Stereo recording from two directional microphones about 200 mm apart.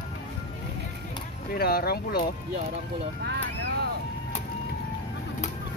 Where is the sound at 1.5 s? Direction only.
50° left (ahead or behind).